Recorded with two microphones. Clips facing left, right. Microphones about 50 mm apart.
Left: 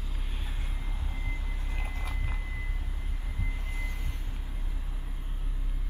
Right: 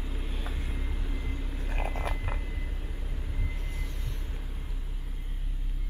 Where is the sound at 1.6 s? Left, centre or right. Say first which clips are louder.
Right 9 dB; right.